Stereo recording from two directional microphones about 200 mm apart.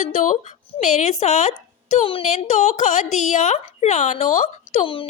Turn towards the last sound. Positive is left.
turn(degrees=25)  # may be behind; listen again after turning